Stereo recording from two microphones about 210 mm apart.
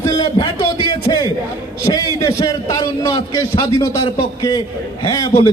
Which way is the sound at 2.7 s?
15° left (ahead or behind).